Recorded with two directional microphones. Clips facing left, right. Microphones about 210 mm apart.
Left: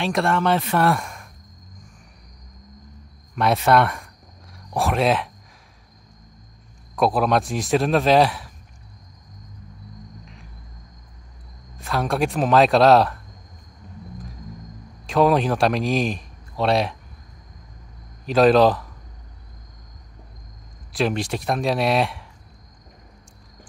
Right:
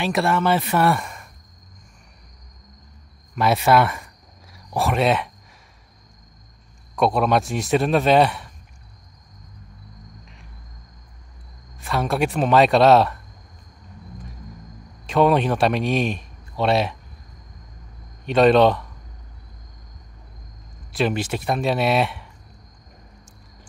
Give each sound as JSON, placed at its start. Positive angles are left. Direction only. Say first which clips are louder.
{"t": 0.0, "sound": "speech", "louder": "even", "side_deg": -5}
{"t": 3.3, "sound": "speech", "louder": "even", "side_deg": -5}
{"t": 7.0, "sound": "speech", "louder": "even", "side_deg": 0}
{"t": 10.2, "sound": "music", "louder": "left 3 dB", "side_deg": 0}
{"t": 11.8, "sound": "speech", "louder": "even", "side_deg": 0}
{"t": 15.0, "sound": "a man's voice", "louder": "even", "side_deg": 0}
{"t": 18.2, "sound": "speech", "louder": "even", "side_deg": 0}
{"t": 20.9, "sound": "speech", "louder": "even", "side_deg": 0}